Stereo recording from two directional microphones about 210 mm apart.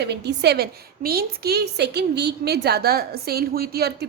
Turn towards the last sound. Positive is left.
turn(degrees=-50)  # may be behind; listen again after turning